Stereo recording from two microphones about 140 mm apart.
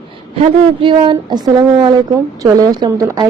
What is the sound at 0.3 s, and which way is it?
A woman's voice, 40° right (ahead or behind).